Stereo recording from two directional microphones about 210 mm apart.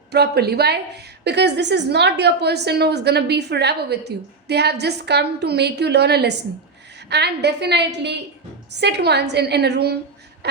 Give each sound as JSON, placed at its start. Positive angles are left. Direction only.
{"t": 0.1, "sound": "a woman's voice", "side_deg": -50}